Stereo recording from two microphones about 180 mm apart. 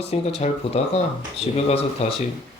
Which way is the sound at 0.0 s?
35° left (ahead or behind).